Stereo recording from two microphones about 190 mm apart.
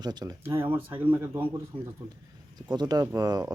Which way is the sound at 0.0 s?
20° right (ahead or behind).